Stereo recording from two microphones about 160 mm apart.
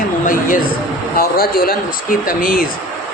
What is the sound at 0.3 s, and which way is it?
Speech, 55° left (ahead or behind).